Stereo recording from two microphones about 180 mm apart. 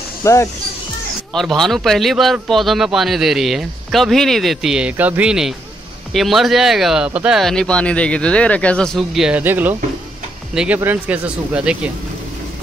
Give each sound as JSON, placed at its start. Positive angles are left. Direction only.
{"t": 0.2, "sound": "speech", "side_deg": 15}
{"t": 1.3, "sound": "a man's voice", "side_deg": 0}